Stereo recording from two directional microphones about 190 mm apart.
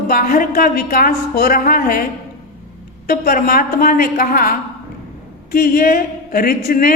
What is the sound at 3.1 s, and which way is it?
Speech, 50° left (ahead or behind).